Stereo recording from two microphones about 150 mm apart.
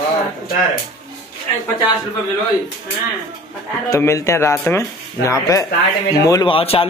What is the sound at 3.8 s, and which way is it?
Speech, 20° left (ahead or behind).